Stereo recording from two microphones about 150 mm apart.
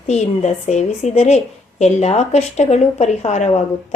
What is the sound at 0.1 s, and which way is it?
A woman's voice, 50° left (ahead or behind).